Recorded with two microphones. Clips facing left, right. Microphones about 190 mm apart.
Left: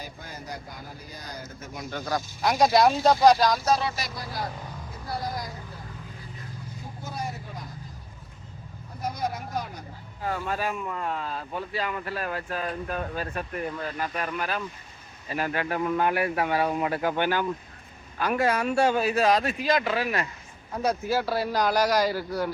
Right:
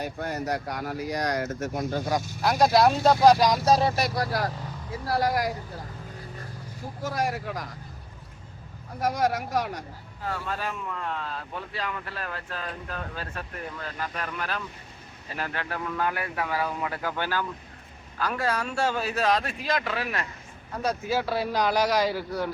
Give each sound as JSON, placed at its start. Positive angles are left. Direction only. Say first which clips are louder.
{"t": 0.0, "sound": "speech", "louder": "right 10 dB", "side_deg": -70}
{"t": 1.9, "sound": "speech", "louder": "even", "side_deg": -25}
{"t": 2.4, "sound": "speech", "louder": "even", "side_deg": -5}
{"t": 3.6, "sound": "speech", "louder": "right 3 dB", "side_deg": -35}
{"t": 3.8, "sound": "speech", "louder": "right 7 dB", "side_deg": -60}
{"t": 7.0, "sound": "speech", "louder": "right 7 dB", "side_deg": -90}
{"t": 9.0, "sound": "speech", "louder": "right 6 dB", "side_deg": -90}
{"t": 10.2, "sound": "speech", "louder": "left 3 dB", "side_deg": 15}